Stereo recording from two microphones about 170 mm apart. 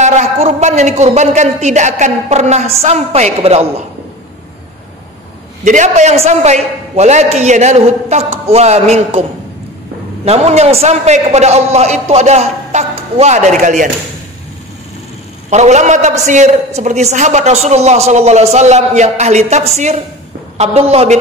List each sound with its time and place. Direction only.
0.0 s a man's voice: 45° right (ahead or behind)
5.7 s a man's voice: 45° right (ahead or behind)
10.2 s a man's voice: 40° right (ahead or behind)
15.5 s a man's voice: 45° right (ahead or behind)